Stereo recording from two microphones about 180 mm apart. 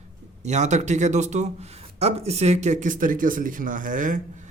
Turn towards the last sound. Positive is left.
turn(degrees=-45)  # may be behind; listen again after turning